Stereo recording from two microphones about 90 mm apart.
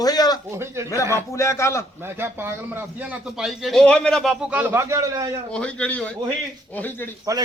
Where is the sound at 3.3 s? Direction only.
5° right (ahead or behind).